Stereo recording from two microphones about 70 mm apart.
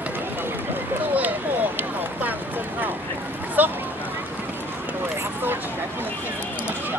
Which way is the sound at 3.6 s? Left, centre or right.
Right.